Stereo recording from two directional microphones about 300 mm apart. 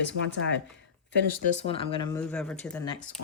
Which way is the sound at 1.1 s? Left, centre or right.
Left.